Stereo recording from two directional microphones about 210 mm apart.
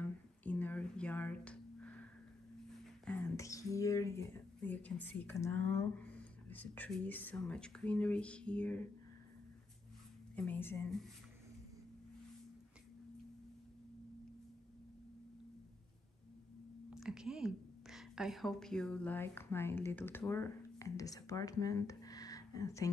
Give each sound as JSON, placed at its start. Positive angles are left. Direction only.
{"t": 0.0, "sound": "music", "side_deg": 10}
{"t": 3.1, "sound": "speech", "side_deg": 10}
{"t": 10.3, "sound": "a woman's voice", "side_deg": 5}
{"t": 16.9, "sound": "a woman's voice", "side_deg": -5}